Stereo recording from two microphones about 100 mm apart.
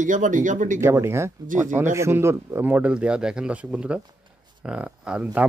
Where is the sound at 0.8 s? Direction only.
25° right (ahead or behind).